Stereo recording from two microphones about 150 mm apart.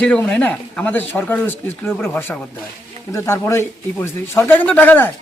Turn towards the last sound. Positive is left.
turn(degrees=15)  # may be behind; listen again after turning